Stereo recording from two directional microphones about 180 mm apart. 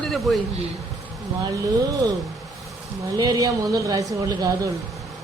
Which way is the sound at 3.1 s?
20° right (ahead or behind).